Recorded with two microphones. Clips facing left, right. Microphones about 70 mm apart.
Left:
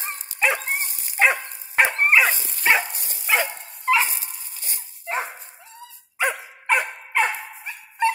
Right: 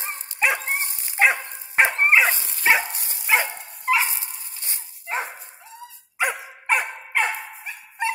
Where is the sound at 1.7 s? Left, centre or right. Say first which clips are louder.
Even; right.